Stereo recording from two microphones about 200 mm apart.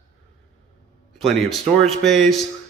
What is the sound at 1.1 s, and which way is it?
A man's voice, centre (ahead or behind).